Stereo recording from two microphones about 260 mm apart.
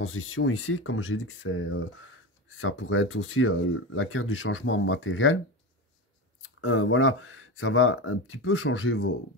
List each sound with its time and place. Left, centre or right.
0.0 s speech: left
6.4 s speech: left